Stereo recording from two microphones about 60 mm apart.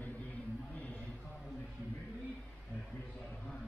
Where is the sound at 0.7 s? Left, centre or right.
Left.